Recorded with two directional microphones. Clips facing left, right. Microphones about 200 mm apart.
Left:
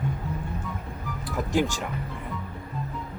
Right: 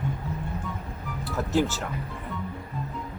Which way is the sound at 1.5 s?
15° left (ahead or behind).